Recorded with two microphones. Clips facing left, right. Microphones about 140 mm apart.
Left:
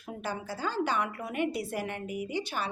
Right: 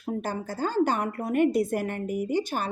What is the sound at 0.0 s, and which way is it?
A woman's voice, 45° right (ahead or behind).